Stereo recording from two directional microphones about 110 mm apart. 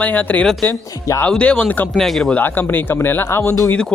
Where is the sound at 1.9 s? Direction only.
Centre (ahead or behind).